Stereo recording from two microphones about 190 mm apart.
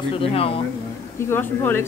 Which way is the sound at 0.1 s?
30° left (ahead or behind).